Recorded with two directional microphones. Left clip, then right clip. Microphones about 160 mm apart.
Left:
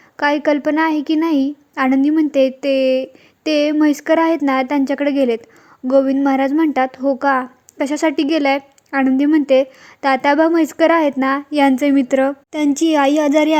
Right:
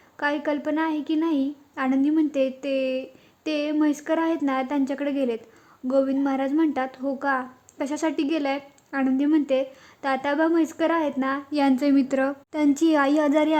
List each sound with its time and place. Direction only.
0.2 s a woman's voice: 30° left (ahead or behind)